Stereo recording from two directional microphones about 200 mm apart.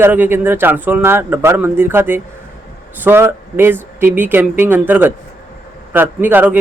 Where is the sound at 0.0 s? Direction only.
10° right (ahead or behind).